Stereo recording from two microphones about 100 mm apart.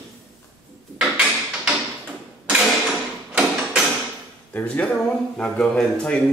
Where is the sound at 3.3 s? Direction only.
10° right (ahead or behind).